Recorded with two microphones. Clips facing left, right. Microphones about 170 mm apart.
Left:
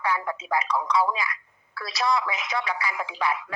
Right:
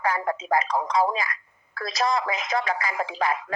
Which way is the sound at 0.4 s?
45° right (ahead or behind).